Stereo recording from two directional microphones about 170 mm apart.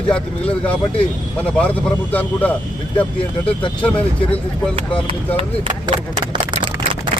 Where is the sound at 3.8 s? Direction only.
5° left (ahead or behind).